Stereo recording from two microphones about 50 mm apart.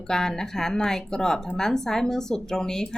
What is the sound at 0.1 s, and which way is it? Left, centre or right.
Speech, centre.